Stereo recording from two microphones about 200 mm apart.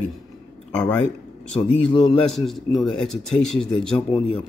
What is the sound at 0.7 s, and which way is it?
Speech, 5° left (ahead or behind).